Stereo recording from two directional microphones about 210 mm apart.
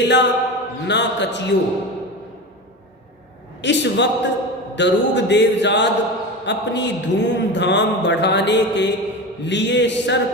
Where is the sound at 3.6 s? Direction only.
55° left (ahead or behind).